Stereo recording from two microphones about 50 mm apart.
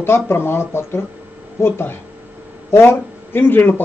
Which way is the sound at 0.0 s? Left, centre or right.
Left.